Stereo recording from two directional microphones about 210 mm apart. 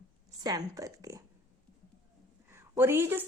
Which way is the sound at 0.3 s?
15° right (ahead or behind).